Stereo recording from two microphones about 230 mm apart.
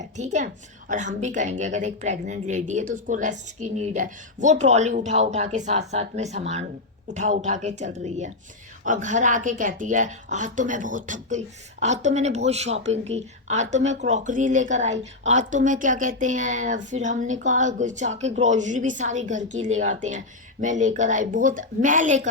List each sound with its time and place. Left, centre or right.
0.2 s speech: right